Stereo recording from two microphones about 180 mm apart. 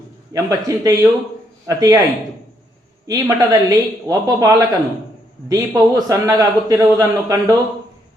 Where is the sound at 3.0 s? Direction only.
20° right (ahead or behind).